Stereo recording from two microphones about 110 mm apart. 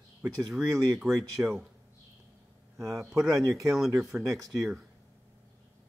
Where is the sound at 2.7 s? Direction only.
30° right (ahead or behind).